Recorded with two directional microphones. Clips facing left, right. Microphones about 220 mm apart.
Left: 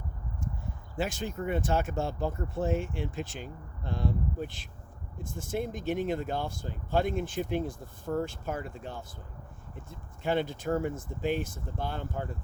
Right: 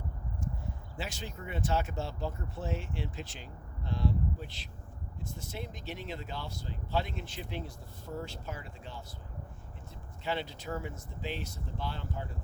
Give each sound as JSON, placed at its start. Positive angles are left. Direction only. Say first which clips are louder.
{"t": 0.9, "sound": "speech", "louder": "left 10 dB", "side_deg": 50}